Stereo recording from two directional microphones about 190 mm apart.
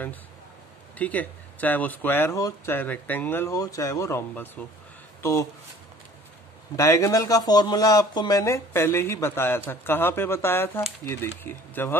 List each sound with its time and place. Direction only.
0.9 s speech: 10° left (ahead or behind)
6.8 s speech: 15° left (ahead or behind)